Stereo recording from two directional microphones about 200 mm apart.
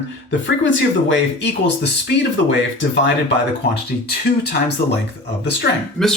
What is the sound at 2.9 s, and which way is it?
Speech, 65° left (ahead or behind).